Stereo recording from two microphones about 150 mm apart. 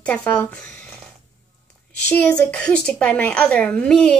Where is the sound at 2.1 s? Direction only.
10° left (ahead or behind).